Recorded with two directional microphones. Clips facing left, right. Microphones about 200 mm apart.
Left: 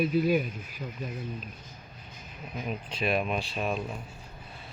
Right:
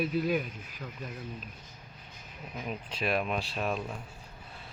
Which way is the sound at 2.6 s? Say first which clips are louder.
Left 2 dB; centre (ahead or behind).